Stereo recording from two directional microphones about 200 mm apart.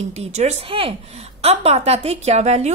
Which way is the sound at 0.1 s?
35° right (ahead or behind).